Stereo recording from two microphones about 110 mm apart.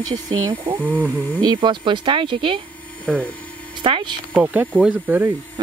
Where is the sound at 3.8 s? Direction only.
45° right (ahead or behind).